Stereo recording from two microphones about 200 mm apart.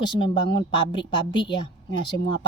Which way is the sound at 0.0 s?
25° left (ahead or behind).